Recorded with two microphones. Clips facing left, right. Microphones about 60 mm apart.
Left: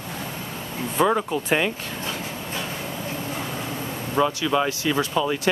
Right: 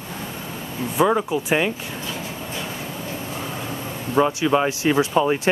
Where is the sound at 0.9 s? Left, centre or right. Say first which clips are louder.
Right 2 dB; centre.